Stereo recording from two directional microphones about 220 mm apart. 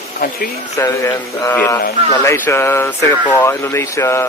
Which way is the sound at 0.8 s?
15° left (ahead or behind).